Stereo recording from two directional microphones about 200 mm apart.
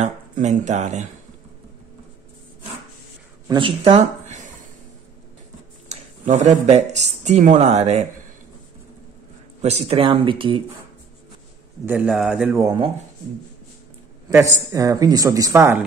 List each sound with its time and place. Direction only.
0.0 s speech: 35° right (ahead or behind)
3.4 s speech: 25° right (ahead or behind)
5.9 s speech: 35° right (ahead or behind)
9.6 s speech: 30° right (ahead or behind)
11.8 s a man's voice: 10° right (ahead or behind)
12.5 s speech: 20° right (ahead or behind)
14.3 s speech: 20° right (ahead or behind)